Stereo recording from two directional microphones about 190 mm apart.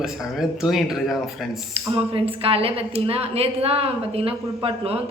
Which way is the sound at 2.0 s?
30° right (ahead or behind).